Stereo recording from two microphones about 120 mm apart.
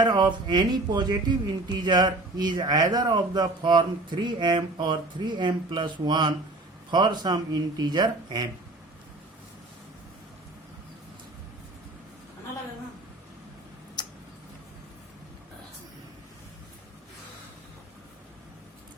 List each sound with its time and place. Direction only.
0.0 s a man's voice: 35° right (ahead or behind)